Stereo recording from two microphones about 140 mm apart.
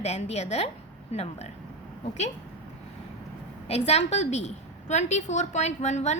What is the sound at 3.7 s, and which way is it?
A woman's voice, 50° left (ahead or behind).